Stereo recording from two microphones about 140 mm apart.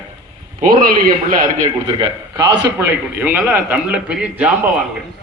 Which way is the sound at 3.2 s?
15° right (ahead or behind).